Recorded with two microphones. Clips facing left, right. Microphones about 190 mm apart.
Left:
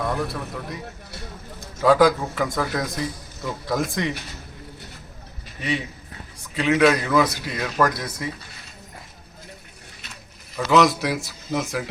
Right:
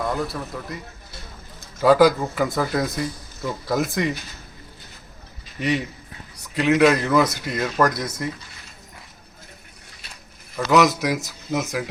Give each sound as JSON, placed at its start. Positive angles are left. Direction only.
{"t": 0.0, "sound": "a man's voice", "side_deg": 0}
{"t": 1.8, "sound": "a man's voice", "side_deg": -5}
{"t": 6.6, "sound": "a man's voice", "side_deg": -10}
{"t": 10.7, "sound": "speech", "side_deg": -15}
{"t": 11.5, "sound": "a man's voice", "side_deg": -5}